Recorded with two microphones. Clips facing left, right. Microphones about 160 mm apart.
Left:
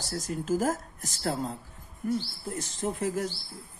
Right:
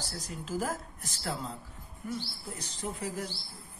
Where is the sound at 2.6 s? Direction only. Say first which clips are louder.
Left 7 dB; 45° left (ahead or behind).